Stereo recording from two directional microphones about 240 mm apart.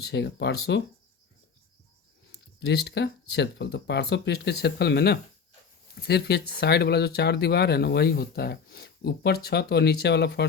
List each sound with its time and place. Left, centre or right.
0.0 s speech: left
2.3 s speech: left